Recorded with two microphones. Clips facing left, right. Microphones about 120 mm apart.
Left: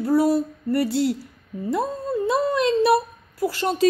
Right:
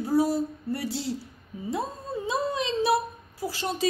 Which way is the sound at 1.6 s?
60° left (ahead or behind).